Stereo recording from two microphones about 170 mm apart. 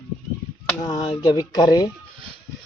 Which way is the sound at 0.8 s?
25° left (ahead or behind).